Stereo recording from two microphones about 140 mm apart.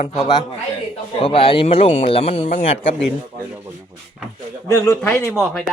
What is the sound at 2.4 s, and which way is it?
Speech, 65° left (ahead or behind).